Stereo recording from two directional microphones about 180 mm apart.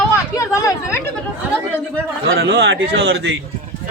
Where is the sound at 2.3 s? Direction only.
70° right (ahead or behind).